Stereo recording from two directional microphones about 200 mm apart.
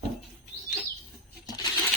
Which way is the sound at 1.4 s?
20° left (ahead or behind).